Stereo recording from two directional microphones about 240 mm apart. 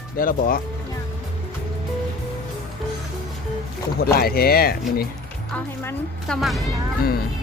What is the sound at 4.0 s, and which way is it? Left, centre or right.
Speech, left.